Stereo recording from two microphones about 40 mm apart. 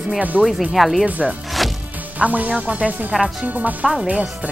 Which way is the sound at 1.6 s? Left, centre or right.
Centre.